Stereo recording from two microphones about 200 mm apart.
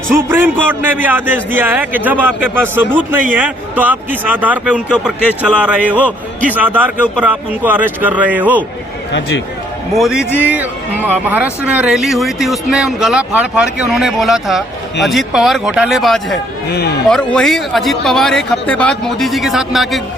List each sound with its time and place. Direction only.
0.1 s a man's voice: 10° right (ahead or behind)
9.9 s speech: centre (ahead or behind)
16.7 s a man's voice: 55° left (ahead or behind)
17.1 s speech: 5° left (ahead or behind)